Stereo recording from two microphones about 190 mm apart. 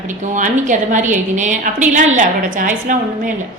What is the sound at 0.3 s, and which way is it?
A woman's voice, 40° right (ahead or behind).